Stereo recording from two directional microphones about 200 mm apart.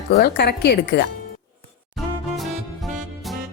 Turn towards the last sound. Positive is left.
turn(degrees=0)  # may be behind; listen again after turning